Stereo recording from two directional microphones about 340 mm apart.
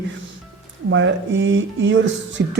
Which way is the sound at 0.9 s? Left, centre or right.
Right.